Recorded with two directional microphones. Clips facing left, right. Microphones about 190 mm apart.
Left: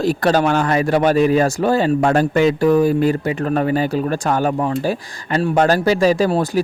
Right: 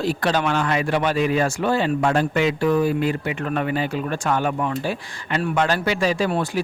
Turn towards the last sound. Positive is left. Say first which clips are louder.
# left 6 dB
turn(degrees=40)  # may be behind; listen again after turning